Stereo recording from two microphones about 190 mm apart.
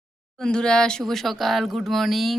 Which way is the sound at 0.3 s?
5° left (ahead or behind).